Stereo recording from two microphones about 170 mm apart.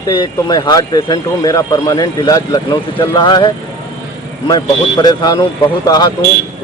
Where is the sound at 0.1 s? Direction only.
25° left (ahead or behind).